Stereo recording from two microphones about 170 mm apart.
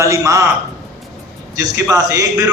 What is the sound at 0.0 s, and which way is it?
Speech, 20° right (ahead or behind).